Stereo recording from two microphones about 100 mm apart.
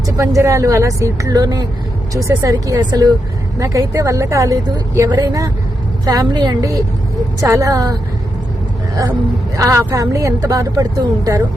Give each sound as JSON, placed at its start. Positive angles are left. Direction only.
{"t": 0.2, "sound": "speech", "side_deg": -30}
{"t": 9.6, "sound": "speech", "side_deg": -30}